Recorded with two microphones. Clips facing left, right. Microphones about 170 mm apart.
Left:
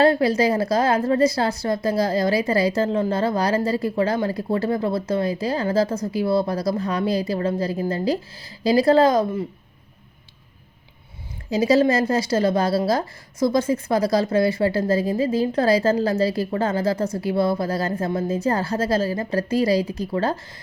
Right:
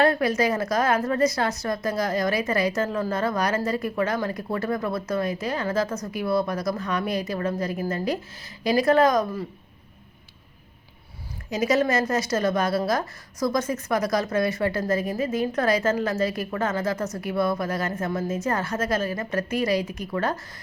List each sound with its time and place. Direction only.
0.0 s a woman's voice: 30° left (ahead or behind)
11.5 s a woman's voice: 30° left (ahead or behind)